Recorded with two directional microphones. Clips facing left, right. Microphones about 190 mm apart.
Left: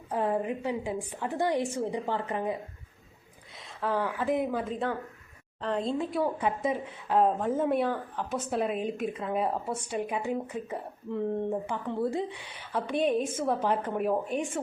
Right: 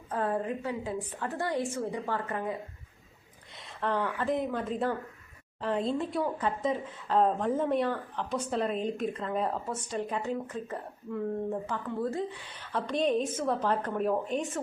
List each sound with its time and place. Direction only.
0.1 s a woman's voice: 15° left (ahead or behind)
3.8 s speech: 5° left (ahead or behind)
6.4 s a woman's voice: 10° left (ahead or behind)
12.1 s a woman's voice: 15° left (ahead or behind)